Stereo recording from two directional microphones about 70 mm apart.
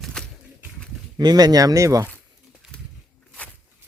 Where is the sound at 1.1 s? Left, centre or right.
Right.